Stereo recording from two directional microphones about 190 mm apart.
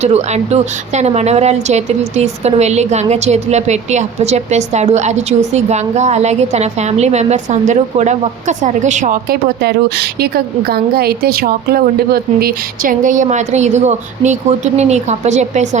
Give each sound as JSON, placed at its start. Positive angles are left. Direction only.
{"t": 0.0, "sound": "a woman's voice", "side_deg": -35}